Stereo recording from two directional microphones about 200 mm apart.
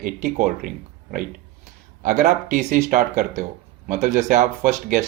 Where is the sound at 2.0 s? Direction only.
35° right (ahead or behind).